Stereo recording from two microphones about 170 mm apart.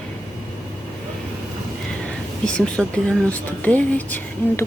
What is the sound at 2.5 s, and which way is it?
Speech, 5° left (ahead or behind).